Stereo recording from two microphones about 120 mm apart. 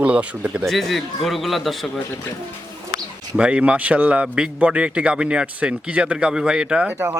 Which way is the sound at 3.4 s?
10° right (ahead or behind).